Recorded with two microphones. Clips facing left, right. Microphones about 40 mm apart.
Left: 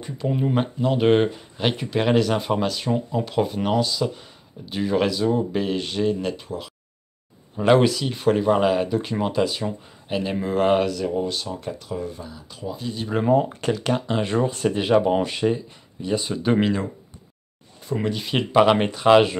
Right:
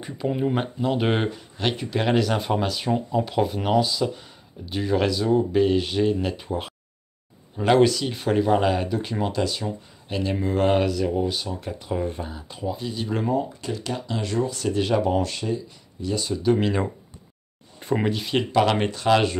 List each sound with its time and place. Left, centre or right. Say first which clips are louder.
0.0 s speech: even; centre
7.5 s speech: left 1 dB; centre
11.8 s speech: right 3 dB; right
12.6 s speech: right 1 dB; centre
13.3 s speech: left 6 dB; left
14.8 s speech: left 3 dB; centre
17.7 s a sound: right 3 dB; right
18.1 s speech: right 1 dB; centre
18.5 s speech: left 5 dB; left